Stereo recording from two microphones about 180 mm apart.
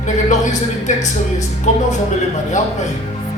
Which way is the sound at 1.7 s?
40° left (ahead or behind).